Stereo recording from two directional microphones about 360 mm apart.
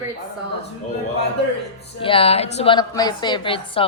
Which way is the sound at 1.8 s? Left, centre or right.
Centre.